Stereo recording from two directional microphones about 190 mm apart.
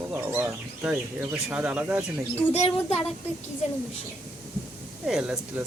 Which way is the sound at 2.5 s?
30° left (ahead or behind).